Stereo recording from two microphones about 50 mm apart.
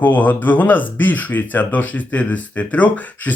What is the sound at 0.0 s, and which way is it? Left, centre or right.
Speech, left.